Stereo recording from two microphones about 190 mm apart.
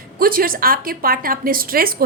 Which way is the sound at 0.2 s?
50° right (ahead or behind).